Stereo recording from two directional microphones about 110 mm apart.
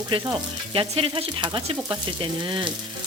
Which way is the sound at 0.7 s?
55° right (ahead or behind).